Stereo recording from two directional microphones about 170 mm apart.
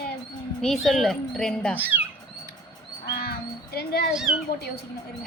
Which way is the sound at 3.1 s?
65° left (ahead or behind).